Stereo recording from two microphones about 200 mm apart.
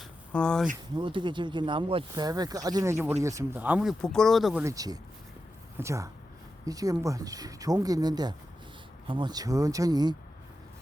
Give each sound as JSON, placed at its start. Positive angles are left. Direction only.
{"t": 0.0, "sound": "a sound", "side_deg": 5}
{"t": 0.9, "sound": "speech", "side_deg": -25}
{"t": 4.6, "sound": "speech", "side_deg": -15}